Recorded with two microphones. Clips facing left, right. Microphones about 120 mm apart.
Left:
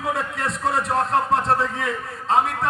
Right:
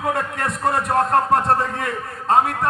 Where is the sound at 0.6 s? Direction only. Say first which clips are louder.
Right 3 dB; 55° right (ahead or behind).